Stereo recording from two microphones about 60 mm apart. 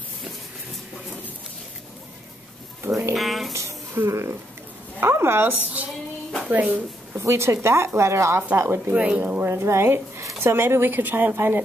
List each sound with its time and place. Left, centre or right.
2.8 s a sound: right
3.2 s a sound: centre
3.5 s a sound: right
5.0 s speech: right
6.4 s a woman's voice: right
7.2 s a woman's voice: right
8.9 s speech: right
9.2 s speech: right
9.5 s a woman's voice: right
11.3 s a woman's voice: right